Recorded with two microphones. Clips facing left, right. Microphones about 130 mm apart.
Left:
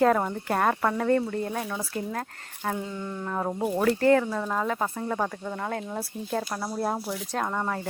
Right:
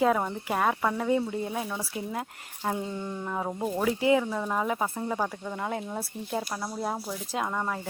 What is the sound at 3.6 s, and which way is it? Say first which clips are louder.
Speech: left 3 dB; 10° left (ahead or behind).